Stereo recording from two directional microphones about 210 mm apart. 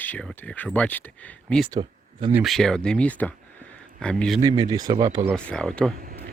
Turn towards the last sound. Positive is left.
turn(degrees=5)  # may be behind; listen again after turning